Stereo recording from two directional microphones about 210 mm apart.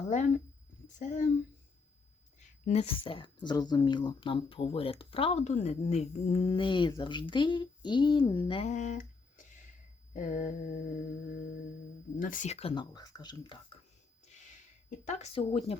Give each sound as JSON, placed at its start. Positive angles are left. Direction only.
{"t": 0.9, "sound": "mantra", "side_deg": 35}
{"t": 2.6, "sound": "speech", "side_deg": 30}
{"t": 10.2, "sound": "mantra", "side_deg": 35}
{"t": 12.1, "sound": "speech", "side_deg": 40}
{"t": 14.8, "sound": "speech", "side_deg": 35}